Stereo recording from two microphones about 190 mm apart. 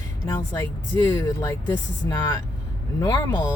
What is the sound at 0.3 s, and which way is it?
Speech, 15° left (ahead or behind).